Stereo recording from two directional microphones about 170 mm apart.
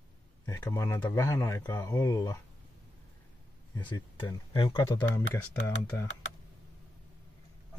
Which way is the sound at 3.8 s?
25° left (ahead or behind).